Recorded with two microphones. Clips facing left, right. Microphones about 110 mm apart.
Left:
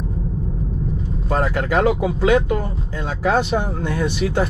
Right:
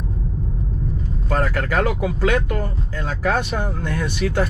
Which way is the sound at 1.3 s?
25° left (ahead or behind).